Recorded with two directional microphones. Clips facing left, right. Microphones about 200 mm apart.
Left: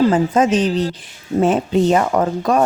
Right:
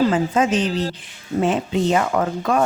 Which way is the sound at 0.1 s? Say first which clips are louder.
Left 4 dB; 40° left (ahead or behind).